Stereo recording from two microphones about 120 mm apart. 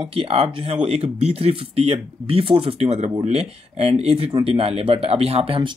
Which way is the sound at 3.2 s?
60° right (ahead or behind).